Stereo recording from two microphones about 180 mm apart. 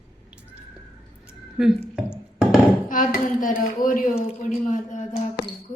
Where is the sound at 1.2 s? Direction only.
5° right (ahead or behind).